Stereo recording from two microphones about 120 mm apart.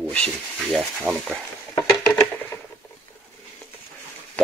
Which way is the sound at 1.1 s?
15° right (ahead or behind).